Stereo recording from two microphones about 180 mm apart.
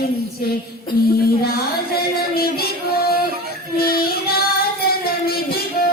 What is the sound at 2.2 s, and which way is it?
Music, 60° left (ahead or behind).